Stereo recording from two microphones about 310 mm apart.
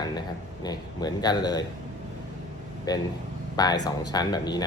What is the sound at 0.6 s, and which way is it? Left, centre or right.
A man's voice, centre.